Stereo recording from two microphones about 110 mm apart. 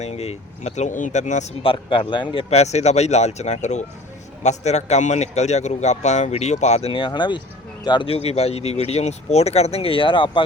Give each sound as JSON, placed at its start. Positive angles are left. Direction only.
{"t": 0.0, "sound": "a man's voice", "side_deg": 75}
{"t": 1.6, "sound": "a man's voice", "side_deg": 50}
{"t": 2.5, "sound": "a man's voice", "side_deg": 80}
{"t": 6.9, "sound": "a man's voice", "side_deg": 45}
{"t": 8.1, "sound": "speech", "side_deg": 70}